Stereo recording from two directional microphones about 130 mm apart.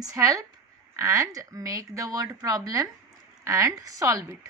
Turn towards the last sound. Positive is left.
turn(degrees=-25)  # may be behind; listen again after turning